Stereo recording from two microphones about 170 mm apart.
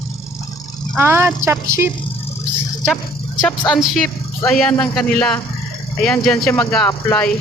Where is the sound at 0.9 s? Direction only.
15° right (ahead or behind).